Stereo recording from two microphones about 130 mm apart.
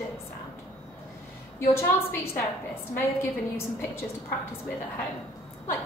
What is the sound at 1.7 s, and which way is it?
A woman's voice, 20° left (ahead or behind).